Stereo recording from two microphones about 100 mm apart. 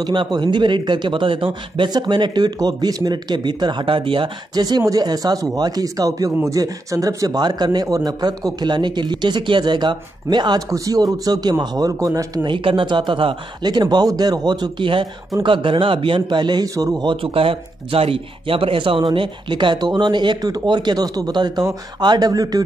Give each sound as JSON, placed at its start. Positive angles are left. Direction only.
{"t": 0.0, "sound": "speech", "side_deg": -50}
{"t": 4.6, "sound": "speech", "side_deg": -40}
{"t": 12.4, "sound": "speech", "side_deg": -55}
{"t": 13.7, "sound": "speech", "side_deg": -45}
{"t": 17.0, "sound": "speech", "side_deg": -60}